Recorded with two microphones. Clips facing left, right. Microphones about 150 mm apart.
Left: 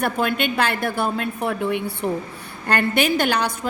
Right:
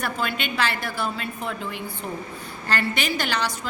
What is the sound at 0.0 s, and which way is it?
A woman's voice, 55° left (ahead or behind).